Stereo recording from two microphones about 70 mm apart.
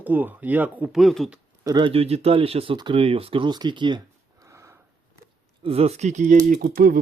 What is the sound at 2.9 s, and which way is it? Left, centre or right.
Speech, right.